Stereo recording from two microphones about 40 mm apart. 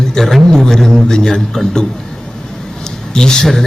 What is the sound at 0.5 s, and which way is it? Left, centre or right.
A man's voice, centre.